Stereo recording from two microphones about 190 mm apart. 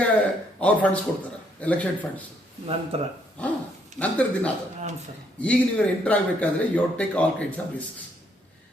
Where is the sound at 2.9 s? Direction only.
30° right (ahead or behind).